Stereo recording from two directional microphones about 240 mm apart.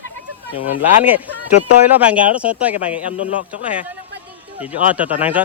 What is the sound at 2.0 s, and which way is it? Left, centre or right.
Speech, centre.